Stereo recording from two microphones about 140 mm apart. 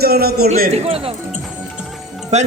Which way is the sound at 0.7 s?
45° right (ahead or behind).